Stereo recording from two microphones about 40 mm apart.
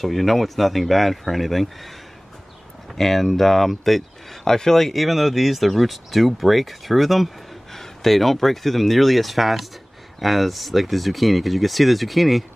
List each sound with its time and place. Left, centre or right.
0.0 s speech: centre
3.0 s speech: centre